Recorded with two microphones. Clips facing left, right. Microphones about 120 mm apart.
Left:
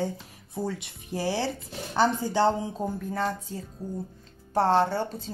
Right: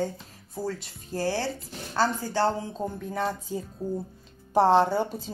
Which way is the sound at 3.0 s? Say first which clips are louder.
Right 1 dB; centre (ahead or behind).